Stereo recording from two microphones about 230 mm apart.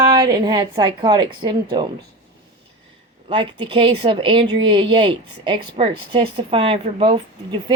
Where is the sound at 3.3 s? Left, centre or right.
Right.